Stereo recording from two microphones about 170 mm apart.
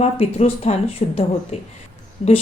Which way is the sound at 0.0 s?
35° left (ahead or behind).